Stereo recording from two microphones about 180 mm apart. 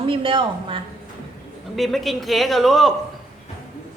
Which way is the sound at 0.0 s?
30° right (ahead or behind).